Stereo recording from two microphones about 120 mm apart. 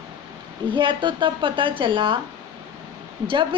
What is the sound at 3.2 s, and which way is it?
Speech, 45° right (ahead or behind).